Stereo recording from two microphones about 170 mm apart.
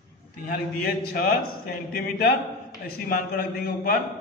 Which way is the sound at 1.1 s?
60° left (ahead or behind).